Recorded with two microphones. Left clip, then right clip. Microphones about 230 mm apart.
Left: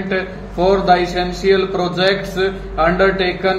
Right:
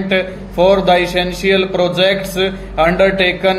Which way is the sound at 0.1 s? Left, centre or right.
Right.